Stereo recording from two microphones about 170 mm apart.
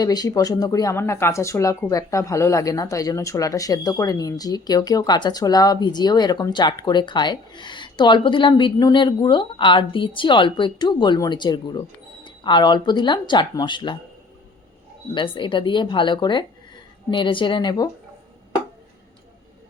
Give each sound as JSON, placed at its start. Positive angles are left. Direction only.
{"t": 0.0, "sound": "speech", "side_deg": 20}
{"t": 15.1, "sound": "speech", "side_deg": 30}